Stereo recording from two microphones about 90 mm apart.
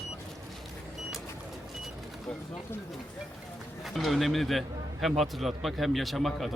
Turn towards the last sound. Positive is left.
turn(degrees=0)  # may be behind; listen again after turning